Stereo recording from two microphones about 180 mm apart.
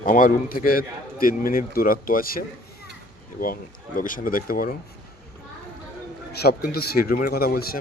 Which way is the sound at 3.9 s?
50° left (ahead or behind).